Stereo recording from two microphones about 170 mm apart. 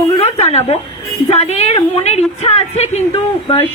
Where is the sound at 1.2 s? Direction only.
40° left (ahead or behind).